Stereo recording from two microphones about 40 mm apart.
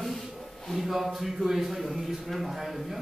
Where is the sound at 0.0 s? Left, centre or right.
Centre.